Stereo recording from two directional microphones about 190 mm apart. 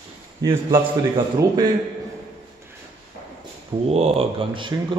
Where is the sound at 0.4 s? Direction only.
20° right (ahead or behind).